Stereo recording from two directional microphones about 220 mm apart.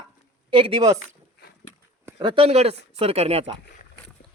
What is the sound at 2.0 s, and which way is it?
Speech, 20° right (ahead or behind).